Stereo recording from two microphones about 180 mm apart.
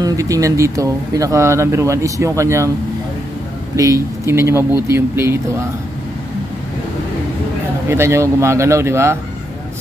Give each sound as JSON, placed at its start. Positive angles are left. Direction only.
{"t": 0.0, "sound": "speech", "side_deg": -20}
{"t": 3.7, "sound": "speech", "side_deg": -20}
{"t": 7.9, "sound": "speech", "side_deg": -15}